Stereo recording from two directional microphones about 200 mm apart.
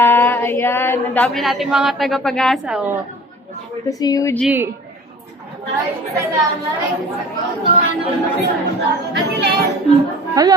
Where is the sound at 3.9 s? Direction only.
20° left (ahead or behind).